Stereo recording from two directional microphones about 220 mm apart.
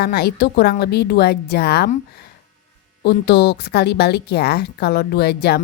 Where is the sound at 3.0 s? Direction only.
50° left (ahead or behind).